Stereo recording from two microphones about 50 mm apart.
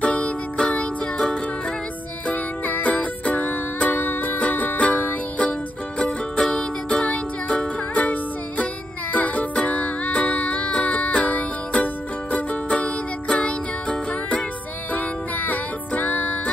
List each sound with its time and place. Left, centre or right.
0.0 s music: left
2.2 s music: left